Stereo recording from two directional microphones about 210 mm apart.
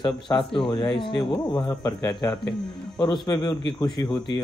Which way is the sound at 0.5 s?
25° left (ahead or behind).